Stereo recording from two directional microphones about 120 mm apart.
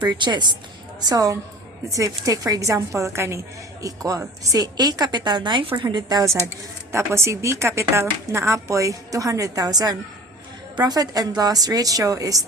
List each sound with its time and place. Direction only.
0.2 s a woman's voice: 40° right (ahead or behind)
6.9 s a woman's voice: 20° right (ahead or behind)